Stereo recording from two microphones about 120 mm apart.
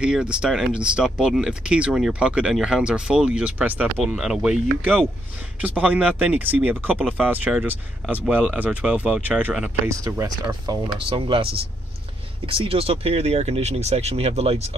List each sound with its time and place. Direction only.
0.0 s speech: 10° right (ahead or behind)
9.8 s speech: 25° right (ahead or behind)
11.0 s speech: 45° right (ahead or behind)
12.4 s speech: 50° right (ahead or behind)